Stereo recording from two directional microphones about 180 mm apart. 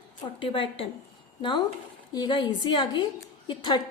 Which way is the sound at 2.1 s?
25° left (ahead or behind).